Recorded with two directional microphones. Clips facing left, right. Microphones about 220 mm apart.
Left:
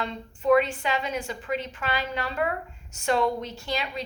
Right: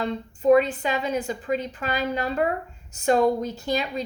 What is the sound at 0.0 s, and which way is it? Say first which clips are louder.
A woman's voice: right 5 dB; 40° right (ahead or behind).